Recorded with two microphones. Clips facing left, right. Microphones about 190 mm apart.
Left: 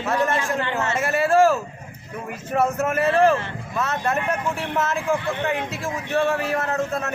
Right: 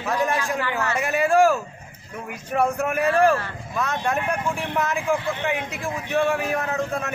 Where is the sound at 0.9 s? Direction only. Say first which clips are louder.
Left 1 dB; centre (ahead or behind).